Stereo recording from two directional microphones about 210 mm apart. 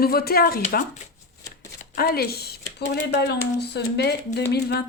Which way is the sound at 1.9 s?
45° left (ahead or behind).